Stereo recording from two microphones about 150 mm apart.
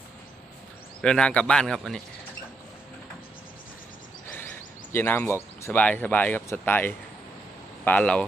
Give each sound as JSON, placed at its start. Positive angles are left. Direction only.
{"t": 1.0, "sound": "speech", "side_deg": 5}
{"t": 4.9, "sound": "speech", "side_deg": 15}